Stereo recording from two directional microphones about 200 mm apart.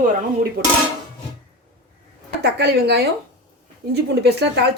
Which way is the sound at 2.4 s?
55° right (ahead or behind).